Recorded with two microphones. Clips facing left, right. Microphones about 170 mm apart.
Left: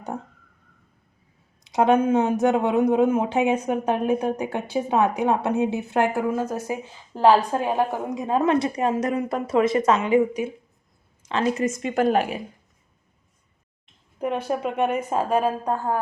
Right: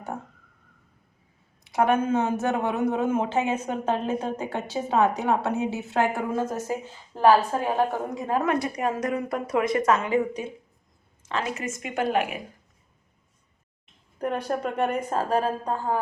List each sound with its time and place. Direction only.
1.7 s speech: 20° left (ahead or behind)
11.2 s a sound: 20° left (ahead or behind)
11.5 s speech: 35° left (ahead or behind)
14.2 s speech: 5° left (ahead or behind)